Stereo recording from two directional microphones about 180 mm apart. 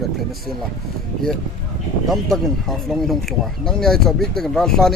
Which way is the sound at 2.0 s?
Centre (ahead or behind).